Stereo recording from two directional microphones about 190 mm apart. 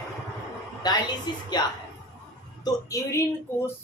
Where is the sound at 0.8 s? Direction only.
20° left (ahead or behind).